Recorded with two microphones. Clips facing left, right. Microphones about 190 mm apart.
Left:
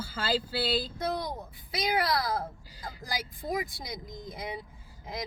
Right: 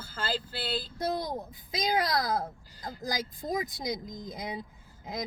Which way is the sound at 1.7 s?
20° right (ahead or behind).